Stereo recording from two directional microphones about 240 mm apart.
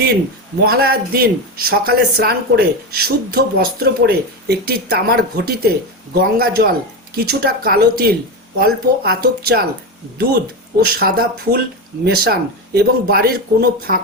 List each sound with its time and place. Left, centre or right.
0.6 s speech: right
11.0 s speech: right